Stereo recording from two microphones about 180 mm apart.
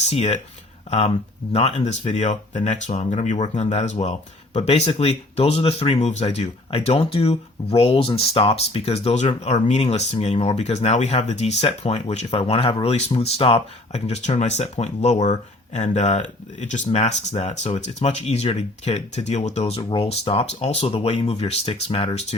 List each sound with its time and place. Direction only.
0.0 s speech: 40° left (ahead or behind)